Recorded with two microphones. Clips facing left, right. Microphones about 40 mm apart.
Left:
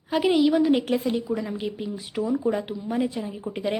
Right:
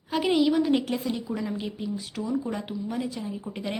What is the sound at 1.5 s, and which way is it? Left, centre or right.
A woman's voice, centre.